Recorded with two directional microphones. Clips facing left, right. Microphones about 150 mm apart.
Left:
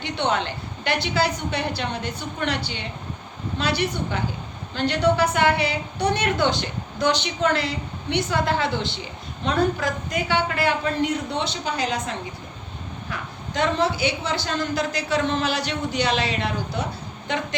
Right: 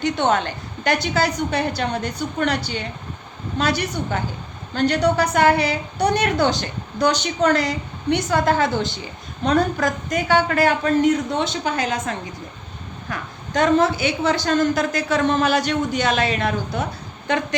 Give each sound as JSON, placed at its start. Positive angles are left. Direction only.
{"t": 0.0, "sound": "a woman's voice", "side_deg": -45}